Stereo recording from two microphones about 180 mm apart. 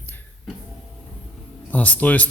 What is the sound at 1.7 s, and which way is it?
Speech, 10° left (ahead or behind).